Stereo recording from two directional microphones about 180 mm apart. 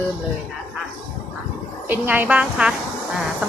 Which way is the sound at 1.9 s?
10° right (ahead or behind).